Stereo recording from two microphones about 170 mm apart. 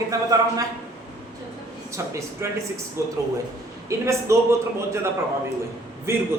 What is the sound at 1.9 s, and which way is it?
A man's voice, 15° right (ahead or behind).